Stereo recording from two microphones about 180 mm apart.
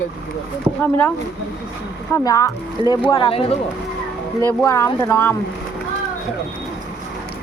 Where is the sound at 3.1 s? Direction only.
30° left (ahead or behind).